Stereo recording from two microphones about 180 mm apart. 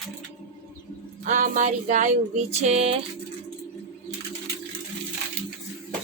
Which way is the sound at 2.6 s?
35° right (ahead or behind).